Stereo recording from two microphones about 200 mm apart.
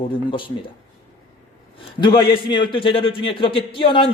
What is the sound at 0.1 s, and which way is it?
Speech, 25° left (ahead or behind).